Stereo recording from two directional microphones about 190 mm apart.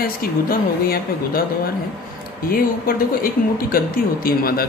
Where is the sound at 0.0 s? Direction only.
50° left (ahead or behind).